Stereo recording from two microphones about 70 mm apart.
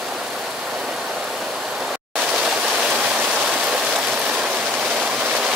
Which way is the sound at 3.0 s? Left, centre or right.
Centre.